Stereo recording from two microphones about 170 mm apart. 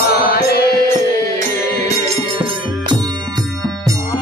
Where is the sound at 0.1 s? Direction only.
65° left (ahead or behind).